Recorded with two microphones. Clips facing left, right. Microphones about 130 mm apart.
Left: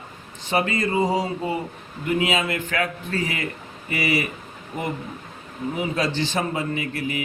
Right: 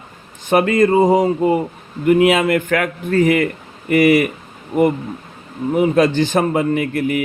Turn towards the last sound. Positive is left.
turn(degrees=-55)  # may be behind; listen again after turning